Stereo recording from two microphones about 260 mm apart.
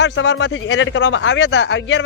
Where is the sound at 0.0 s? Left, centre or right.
Left.